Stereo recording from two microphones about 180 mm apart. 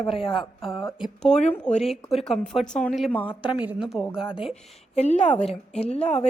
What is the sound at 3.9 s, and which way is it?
Speech, 5° right (ahead or behind).